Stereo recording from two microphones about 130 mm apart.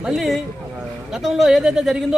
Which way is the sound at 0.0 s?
5° right (ahead or behind).